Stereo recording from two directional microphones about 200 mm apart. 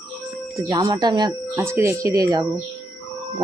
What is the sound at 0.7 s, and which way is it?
Speech, 20° right (ahead or behind).